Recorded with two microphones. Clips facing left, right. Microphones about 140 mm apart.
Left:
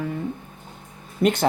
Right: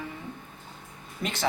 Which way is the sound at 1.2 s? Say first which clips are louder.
Left 10 dB; 50° left (ahead or behind).